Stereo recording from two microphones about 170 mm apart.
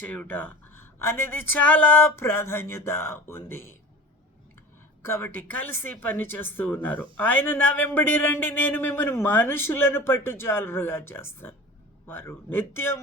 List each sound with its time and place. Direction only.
0.0 s speech: 10° left (ahead or behind)
5.0 s speech: 15° left (ahead or behind)